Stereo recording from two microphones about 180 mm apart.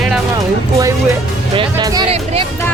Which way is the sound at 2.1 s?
35° right (ahead or behind).